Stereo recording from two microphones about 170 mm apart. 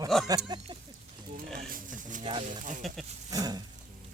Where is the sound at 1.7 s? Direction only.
50° right (ahead or behind).